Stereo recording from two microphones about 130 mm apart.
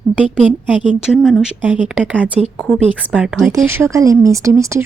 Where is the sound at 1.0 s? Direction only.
Centre (ahead or behind).